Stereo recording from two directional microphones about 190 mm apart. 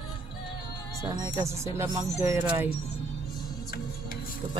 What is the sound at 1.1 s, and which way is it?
Speech, 20° right (ahead or behind).